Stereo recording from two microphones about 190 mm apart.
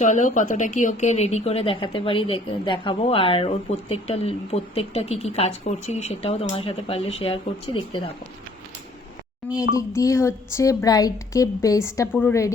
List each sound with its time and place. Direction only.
0.0 s a woman's voice: 40° left (ahead or behind)
9.7 s a woman's voice: 15° left (ahead or behind)